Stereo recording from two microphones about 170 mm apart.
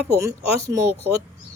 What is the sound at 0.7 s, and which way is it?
Speech, 15° right (ahead or behind).